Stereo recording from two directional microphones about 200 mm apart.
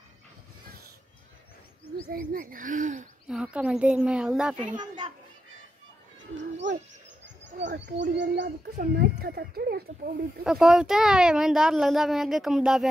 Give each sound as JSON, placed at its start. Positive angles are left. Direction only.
{"t": 2.1, "sound": "speech", "side_deg": -45}
{"t": 3.3, "sound": "a child's voice", "side_deg": -5}
{"t": 4.7, "sound": "a child's voice", "side_deg": -20}
{"t": 7.6, "sound": "speech", "side_deg": -60}
{"t": 10.4, "sound": "a child's voice", "side_deg": -5}